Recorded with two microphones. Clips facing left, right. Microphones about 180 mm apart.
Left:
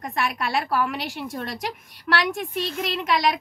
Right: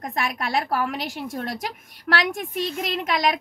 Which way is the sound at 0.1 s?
45° right (ahead or behind).